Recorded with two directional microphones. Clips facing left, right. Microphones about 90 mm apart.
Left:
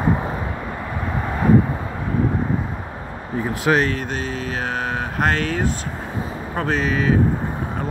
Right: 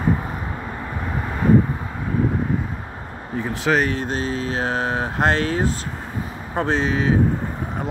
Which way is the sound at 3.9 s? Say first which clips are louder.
Right 2 dB; 35° right (ahead or behind).